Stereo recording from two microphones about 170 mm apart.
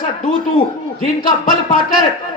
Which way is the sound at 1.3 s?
55° left (ahead or behind).